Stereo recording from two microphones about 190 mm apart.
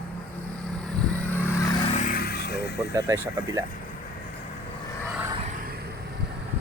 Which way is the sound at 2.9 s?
15° right (ahead or behind).